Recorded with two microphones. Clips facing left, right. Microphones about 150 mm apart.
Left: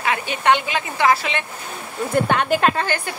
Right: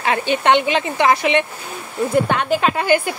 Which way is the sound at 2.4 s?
Centre (ahead or behind).